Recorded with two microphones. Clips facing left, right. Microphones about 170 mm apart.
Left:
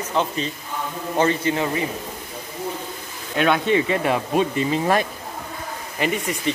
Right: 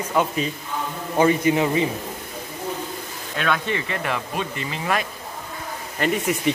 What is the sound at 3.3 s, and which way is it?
Speech, 20° left (ahead or behind).